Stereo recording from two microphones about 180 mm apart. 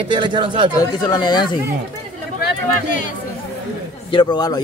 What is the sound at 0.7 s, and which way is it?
Speech, 20° left (ahead or behind).